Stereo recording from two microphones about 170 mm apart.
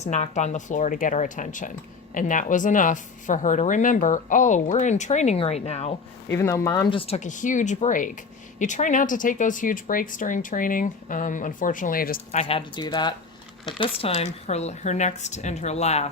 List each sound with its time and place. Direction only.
0.0 s speech: 45° left (ahead or behind)
6.3 s speech: 15° left (ahead or behind)
6.9 s speech: 35° left (ahead or behind); by 12.2 s 60° left (ahead or behind)
12.3 s speech: 40° left (ahead or behind)